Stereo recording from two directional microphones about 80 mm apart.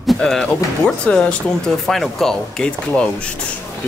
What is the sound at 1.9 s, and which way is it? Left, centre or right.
Speech, centre.